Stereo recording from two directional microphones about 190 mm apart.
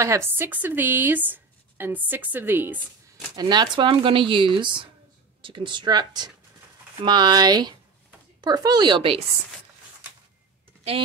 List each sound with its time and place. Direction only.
0.0 s a woman's voice: 15° right (ahead or behind)
3.3 s speech: 20° right (ahead or behind)